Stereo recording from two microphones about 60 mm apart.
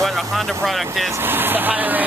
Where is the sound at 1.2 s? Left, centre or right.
Right.